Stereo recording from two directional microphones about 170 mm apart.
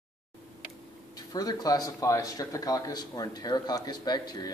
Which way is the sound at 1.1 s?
20° left (ahead or behind).